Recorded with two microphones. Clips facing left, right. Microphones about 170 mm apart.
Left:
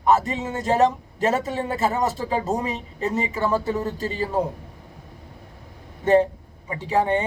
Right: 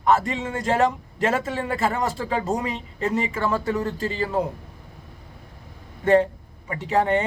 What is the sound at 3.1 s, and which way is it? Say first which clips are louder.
Speech: left 1 dB; 20° left (ahead or behind).